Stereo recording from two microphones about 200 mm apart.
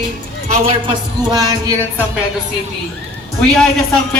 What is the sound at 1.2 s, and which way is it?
Music, 20° right (ahead or behind).